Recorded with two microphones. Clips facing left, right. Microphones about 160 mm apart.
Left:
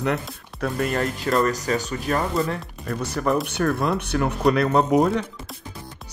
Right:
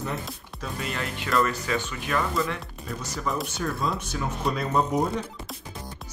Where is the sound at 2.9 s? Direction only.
60° left (ahead or behind).